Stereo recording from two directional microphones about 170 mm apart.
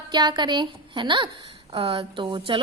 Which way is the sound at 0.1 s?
25° right (ahead or behind).